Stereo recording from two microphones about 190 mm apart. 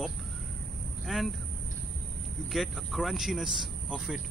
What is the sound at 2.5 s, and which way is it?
Speech, centre (ahead or behind).